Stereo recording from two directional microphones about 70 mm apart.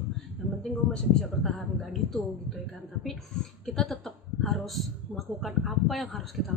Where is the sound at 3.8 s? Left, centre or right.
Centre.